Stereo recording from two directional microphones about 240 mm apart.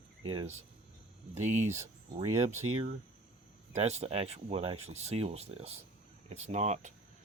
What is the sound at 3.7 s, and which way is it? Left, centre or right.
Speech, right.